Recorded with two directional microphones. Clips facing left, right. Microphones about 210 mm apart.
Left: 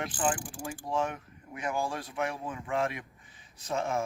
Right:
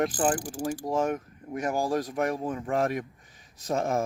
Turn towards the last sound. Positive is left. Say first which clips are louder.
# right 4 dB
turn(degrees=-40)  # may be behind; listen again after turning